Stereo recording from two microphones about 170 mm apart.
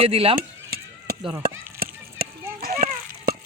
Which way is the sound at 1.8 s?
60° right (ahead or behind).